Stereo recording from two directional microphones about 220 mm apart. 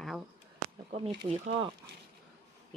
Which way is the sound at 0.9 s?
25° right (ahead or behind).